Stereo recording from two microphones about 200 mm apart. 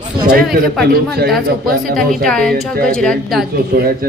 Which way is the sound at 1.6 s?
45° right (ahead or behind).